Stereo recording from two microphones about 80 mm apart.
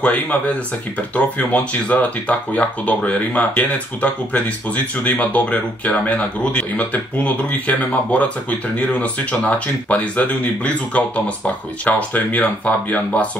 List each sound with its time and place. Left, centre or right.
0.0 s speech: centre